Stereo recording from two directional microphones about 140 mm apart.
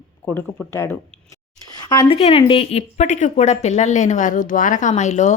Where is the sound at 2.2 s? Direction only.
40° left (ahead or behind).